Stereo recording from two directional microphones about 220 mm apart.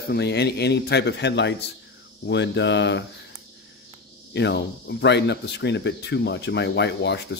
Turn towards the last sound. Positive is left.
turn(degrees=50)  # may be behind; listen again after turning